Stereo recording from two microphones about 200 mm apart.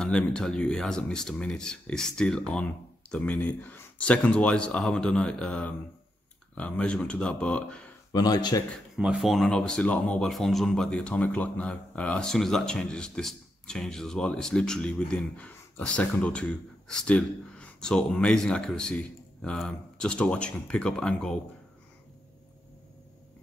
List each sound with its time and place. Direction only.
0.0 s speech: 5° left (ahead or behind)
8.1 s speech: 20° left (ahead or behind)
8.9 s speech: centre (ahead or behind)